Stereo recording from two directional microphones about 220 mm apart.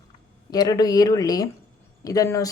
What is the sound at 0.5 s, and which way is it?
Speech, 15° left (ahead or behind).